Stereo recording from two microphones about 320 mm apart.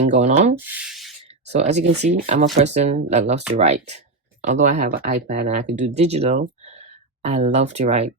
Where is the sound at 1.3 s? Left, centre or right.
Right.